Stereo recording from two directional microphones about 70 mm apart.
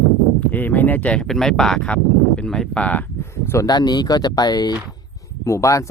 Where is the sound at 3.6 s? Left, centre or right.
Left.